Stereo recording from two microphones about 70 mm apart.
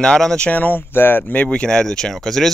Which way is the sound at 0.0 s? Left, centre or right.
Centre.